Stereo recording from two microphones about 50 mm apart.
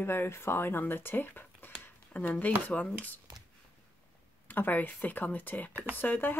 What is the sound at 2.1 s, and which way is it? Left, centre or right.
Speech, left.